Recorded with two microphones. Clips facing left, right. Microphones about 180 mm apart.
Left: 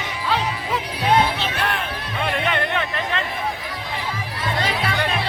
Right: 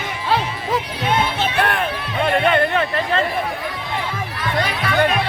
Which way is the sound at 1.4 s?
55° right (ahead or behind).